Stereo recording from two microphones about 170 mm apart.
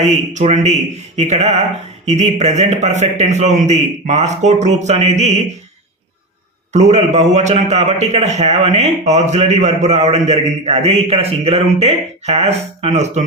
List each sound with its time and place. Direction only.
0.0 s a man's voice: 40° right (ahead or behind)
6.7 s a man's voice: 40° right (ahead or behind)